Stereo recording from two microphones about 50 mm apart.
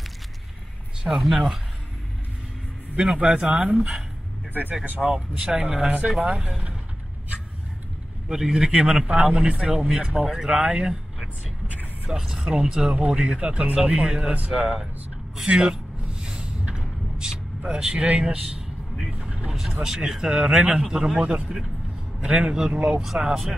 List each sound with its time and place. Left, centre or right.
1.0 s speech: centre
3.0 s speech: centre
4.8 s speech: right
5.1 s speech: centre
8.3 s speech: centre
12.1 s speech: centre
15.4 s a sound: centre
18.4 s vehicle: centre
19.0 s vehicle: right
19.8 s a man's voice: centre